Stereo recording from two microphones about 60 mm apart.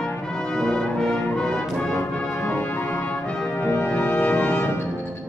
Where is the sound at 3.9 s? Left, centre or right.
Left.